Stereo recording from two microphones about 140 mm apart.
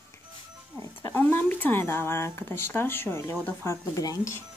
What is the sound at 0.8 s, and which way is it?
Speech, 15° left (ahead or behind).